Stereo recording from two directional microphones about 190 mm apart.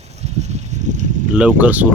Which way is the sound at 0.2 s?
35° right (ahead or behind).